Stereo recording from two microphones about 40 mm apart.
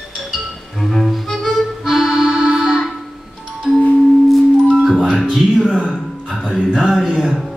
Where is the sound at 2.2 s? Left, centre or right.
Right.